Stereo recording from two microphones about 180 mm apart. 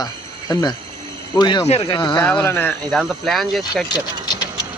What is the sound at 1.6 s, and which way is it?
Speech, 35° left (ahead or behind).